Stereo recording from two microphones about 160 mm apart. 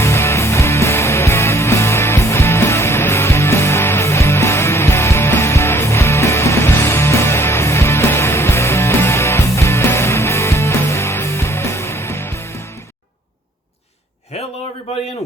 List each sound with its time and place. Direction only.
0.0 s music: 15° left (ahead or behind)